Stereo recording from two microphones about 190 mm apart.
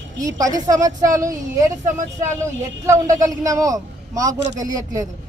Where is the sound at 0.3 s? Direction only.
20° right (ahead or behind).